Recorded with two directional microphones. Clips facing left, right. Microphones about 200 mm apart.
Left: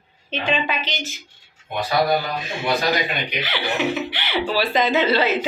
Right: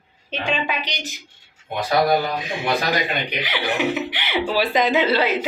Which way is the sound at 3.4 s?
15° right (ahead or behind).